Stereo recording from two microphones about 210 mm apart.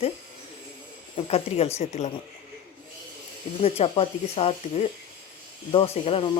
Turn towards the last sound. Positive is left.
turn(degrees=25)  # may be behind; listen again after turning